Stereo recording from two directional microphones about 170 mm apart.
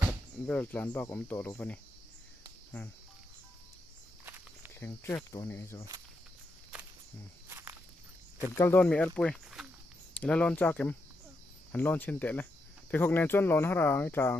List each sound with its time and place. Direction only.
0.5 s speech: 10° left (ahead or behind)
4.2 s walk: 10° right (ahead or behind)
4.7 s speech: 15° left (ahead or behind)
7.4 s walk: 15° right (ahead or behind)
8.5 s speech: 15° left (ahead or behind)